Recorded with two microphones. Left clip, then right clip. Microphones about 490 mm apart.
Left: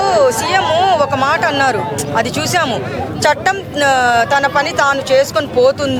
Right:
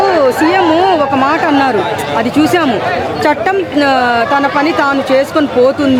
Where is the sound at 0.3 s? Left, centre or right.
Left.